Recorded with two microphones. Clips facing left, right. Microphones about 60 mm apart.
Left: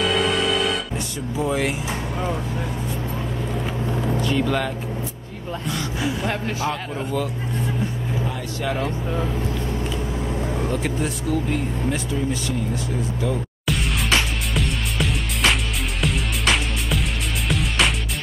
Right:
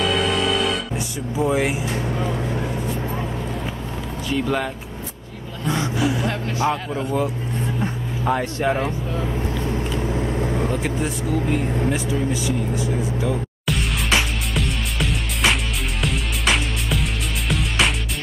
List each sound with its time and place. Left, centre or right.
0.0 s music: centre
0.9 s speech: centre
1.9 s speech: centre
4.2 s speech: centre
5.7 s speech: right
8.5 s speech: right
10.5 s vehicle: centre
10.8 s vehicle: centre
16.0 s music: centre